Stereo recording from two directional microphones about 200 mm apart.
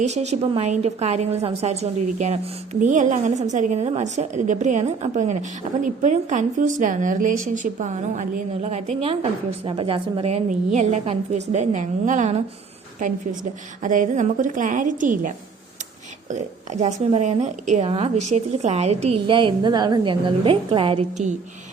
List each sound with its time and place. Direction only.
0.0 s a woman's voice: 35° right (ahead or behind)
13.8 s a woman's voice: 40° right (ahead or behind)
16.8 s a woman's voice: 35° right (ahead or behind)